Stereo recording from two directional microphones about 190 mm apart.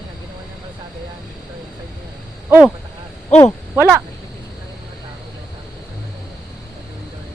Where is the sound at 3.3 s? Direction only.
35° left (ahead or behind).